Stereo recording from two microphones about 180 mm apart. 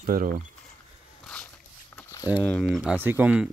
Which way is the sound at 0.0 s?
50° right (ahead or behind).